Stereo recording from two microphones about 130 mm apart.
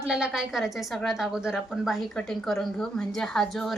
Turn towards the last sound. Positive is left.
turn(degrees=0)  # may be behind; listen again after turning